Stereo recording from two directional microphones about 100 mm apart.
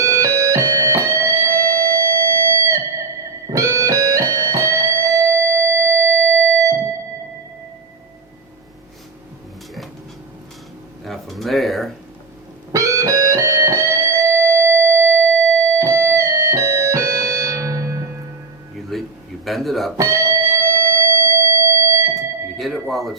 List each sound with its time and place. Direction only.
0.4 s music: 35° right (ahead or behind)
4.5 s music: 30° right (ahead or behind)
6.3 s music: 15° left (ahead or behind)
11.0 s a sound: centre (ahead or behind)
12.7 s music: 30° right (ahead or behind)
18.8 s a sound: centre (ahead or behind)
19.5 s music: centre (ahead or behind)
20.0 s music: 30° right (ahead or behind)
22.5 s a sound: centre (ahead or behind)